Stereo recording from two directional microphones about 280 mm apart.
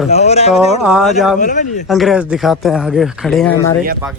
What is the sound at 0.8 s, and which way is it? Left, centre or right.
Speech, centre.